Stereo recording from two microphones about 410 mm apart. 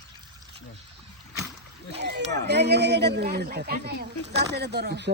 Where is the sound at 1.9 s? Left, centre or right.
Right.